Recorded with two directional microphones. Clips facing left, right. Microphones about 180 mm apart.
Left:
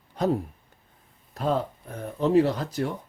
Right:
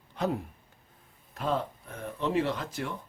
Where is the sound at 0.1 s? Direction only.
40° left (ahead or behind).